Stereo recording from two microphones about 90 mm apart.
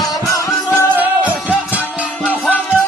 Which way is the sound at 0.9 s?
15° right (ahead or behind).